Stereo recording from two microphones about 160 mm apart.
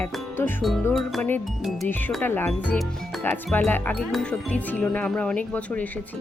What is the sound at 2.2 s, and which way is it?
Speech, 15° left (ahead or behind).